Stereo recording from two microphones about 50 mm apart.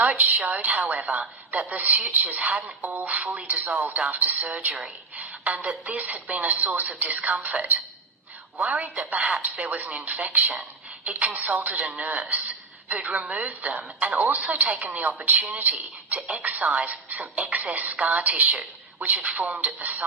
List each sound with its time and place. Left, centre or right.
0.0 s a woman's voice: right
2.6 s a woman's voice: right